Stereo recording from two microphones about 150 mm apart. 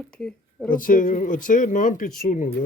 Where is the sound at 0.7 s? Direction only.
65° left (ahead or behind).